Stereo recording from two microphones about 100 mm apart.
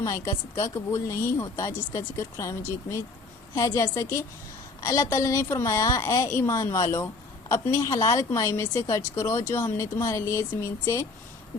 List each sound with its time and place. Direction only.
0.0 s a woman's voice: 35° left (ahead or behind)